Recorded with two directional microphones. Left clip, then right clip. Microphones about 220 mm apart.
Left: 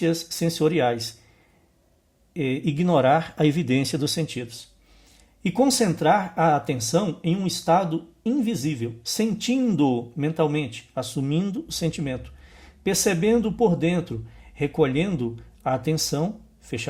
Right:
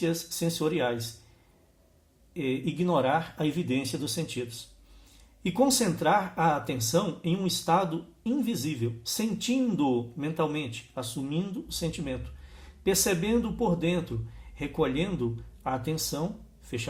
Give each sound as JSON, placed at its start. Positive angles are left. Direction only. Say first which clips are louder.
{"t": 0.0, "sound": "speech", "louder": "left 5 dB", "side_deg": 45}
{"t": 2.3, "sound": "speech", "louder": "left 5 dB", "side_deg": 45}